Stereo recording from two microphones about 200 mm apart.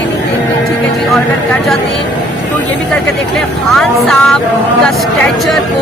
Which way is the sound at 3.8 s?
Centre (ahead or behind).